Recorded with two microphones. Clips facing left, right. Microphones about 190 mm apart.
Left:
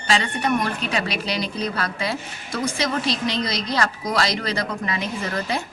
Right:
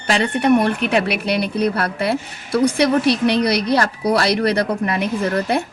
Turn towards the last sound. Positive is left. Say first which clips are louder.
# right 7 dB
turn(degrees=-60)  # may be behind; listen again after turning